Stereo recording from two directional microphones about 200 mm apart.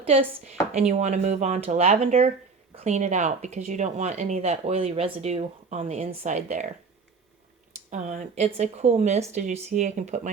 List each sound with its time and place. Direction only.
0.0 s speech: 30° right (ahead or behind)
7.9 s speech: 35° right (ahead or behind)